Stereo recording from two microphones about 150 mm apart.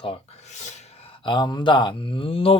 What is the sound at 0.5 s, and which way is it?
Speech, 50° left (ahead or behind).